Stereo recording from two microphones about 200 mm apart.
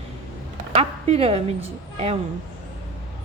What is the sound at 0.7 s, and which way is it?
A woman's voice, 30° right (ahead or behind).